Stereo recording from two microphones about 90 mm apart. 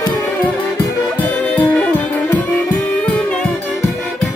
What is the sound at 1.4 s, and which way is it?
Music, 15° left (ahead or behind).